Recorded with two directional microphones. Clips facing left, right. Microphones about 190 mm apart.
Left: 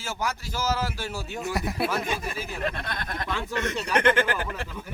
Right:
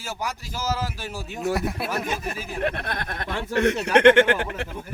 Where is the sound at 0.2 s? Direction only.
15° right (ahead or behind).